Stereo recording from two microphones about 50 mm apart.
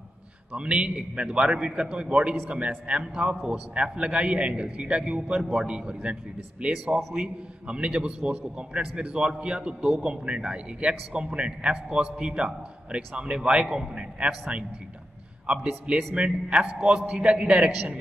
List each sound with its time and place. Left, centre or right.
0.5 s a man's voice: right
9.8 s a man's voice: centre